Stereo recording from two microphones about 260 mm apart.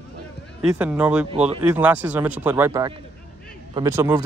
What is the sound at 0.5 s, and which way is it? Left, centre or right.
Speech, centre.